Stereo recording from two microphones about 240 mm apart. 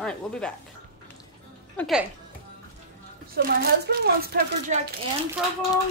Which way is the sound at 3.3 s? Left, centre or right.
Right.